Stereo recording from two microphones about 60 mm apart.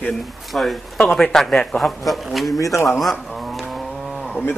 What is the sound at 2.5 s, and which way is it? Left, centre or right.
Speech, left.